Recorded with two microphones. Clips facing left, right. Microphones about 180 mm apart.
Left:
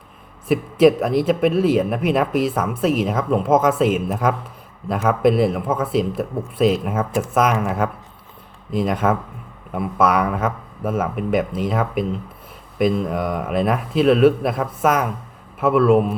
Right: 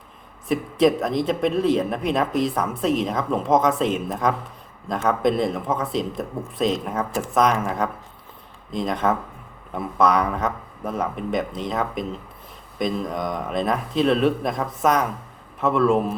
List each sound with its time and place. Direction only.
0.4 s a man's voice: 5° left (ahead or behind)